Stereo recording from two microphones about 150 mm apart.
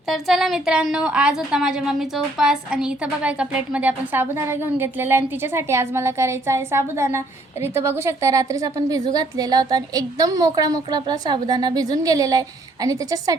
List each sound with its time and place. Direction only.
0.1 s a woman's voice: centre (ahead or behind); by 13.3 s 25° right (ahead or behind)